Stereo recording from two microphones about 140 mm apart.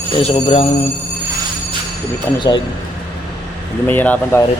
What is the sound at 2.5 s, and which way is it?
Speech, 30° left (ahead or behind).